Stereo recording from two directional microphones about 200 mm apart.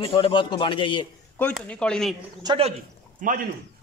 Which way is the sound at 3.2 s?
40° right (ahead or behind).